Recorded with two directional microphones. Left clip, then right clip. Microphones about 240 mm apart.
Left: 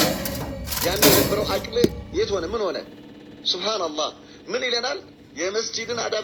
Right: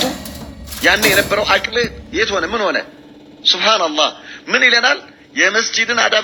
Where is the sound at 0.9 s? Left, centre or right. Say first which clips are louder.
Right 5 dB; right.